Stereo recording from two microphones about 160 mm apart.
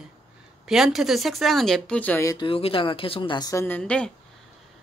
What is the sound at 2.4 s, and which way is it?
Speech, 35° left (ahead or behind).